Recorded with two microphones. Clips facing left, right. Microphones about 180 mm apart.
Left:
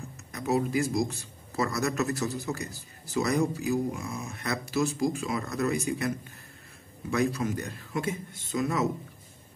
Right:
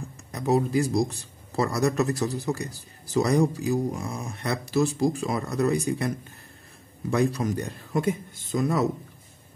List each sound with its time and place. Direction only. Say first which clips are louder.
0.3 s speech: right 4 dB; 35° right (ahead or behind)
7.1 s speech: right 3 dB; 35° right (ahead or behind)